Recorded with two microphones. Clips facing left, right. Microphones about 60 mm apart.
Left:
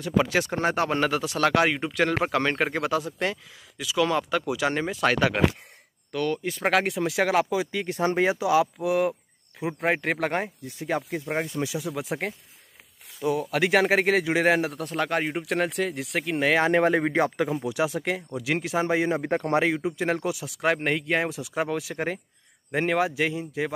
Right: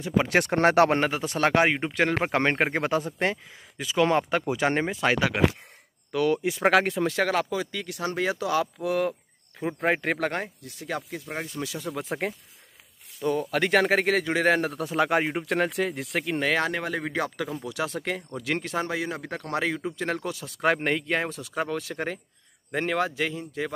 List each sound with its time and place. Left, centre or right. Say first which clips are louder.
0.0 s speech: left 1 dB; centre
0.3 s speech: right 4 dB; right
1.2 s speech: right 1 dB; right
5.0 s speech: left 2 dB; centre
7.8 s speech: left 5 dB; left
11.7 s speech: left 2 dB; centre
16.6 s speech: left 8 dB; left; by 18.9 s centre
18.9 s speech: left 7 dB; left
19.6 s speech: left 3 dB; centre